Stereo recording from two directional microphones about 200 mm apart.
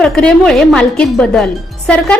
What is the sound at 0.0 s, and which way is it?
A woman's voice, 5° left (ahead or behind).